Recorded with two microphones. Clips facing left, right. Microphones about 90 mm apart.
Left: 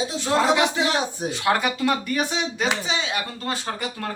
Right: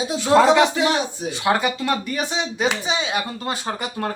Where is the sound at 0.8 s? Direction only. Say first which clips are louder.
Right 3 dB; 20° left (ahead or behind).